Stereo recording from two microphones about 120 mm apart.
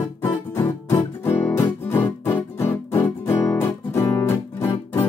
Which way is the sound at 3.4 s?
20° left (ahead or behind).